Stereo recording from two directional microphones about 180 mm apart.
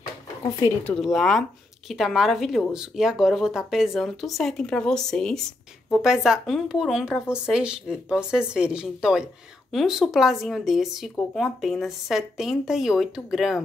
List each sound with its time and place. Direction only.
0.6 s speech: 15° left (ahead or behind)
0.9 s speech: centre (ahead or behind)